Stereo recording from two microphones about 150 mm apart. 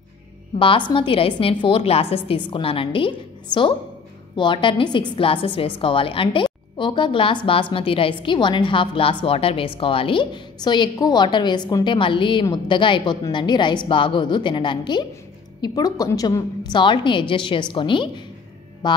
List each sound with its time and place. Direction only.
0.6 s a woman's voice: 35° left (ahead or behind)